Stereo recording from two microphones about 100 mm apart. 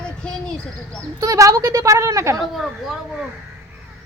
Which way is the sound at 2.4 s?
Centre (ahead or behind).